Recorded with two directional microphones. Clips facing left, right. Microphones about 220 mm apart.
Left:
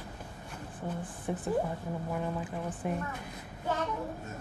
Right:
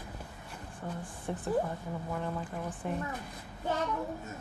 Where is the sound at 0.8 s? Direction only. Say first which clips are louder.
Left 2 dB; 10° left (ahead or behind).